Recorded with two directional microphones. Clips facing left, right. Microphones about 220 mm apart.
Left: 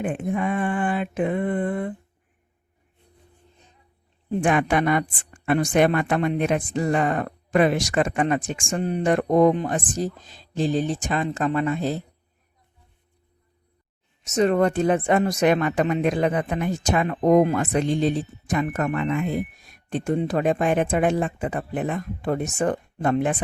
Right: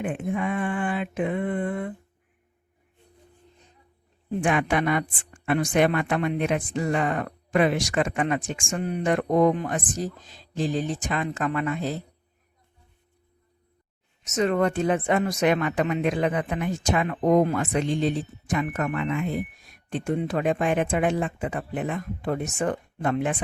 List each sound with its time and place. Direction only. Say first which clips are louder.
0.0 s speech: left 2 dB; 40° left (ahead or behind)
4.4 s speech: left 3 dB; 40° left (ahead or behind)
14.3 s speech: left 3 dB; 30° left (ahead or behind)